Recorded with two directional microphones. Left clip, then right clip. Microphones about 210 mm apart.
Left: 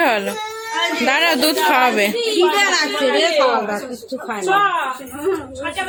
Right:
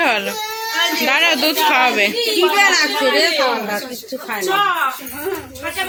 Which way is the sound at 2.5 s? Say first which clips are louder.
Right 3 dB; 40° left (ahead or behind).